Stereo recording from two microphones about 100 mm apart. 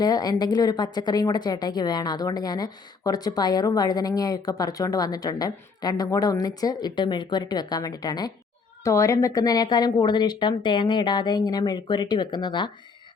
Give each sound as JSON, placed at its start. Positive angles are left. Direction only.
{"t": 0.0, "sound": "speech", "side_deg": 40}
{"t": 8.8, "sound": "a woman's voice", "side_deg": 30}